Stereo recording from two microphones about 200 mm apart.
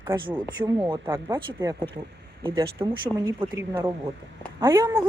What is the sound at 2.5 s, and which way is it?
Speech, 20° right (ahead or behind).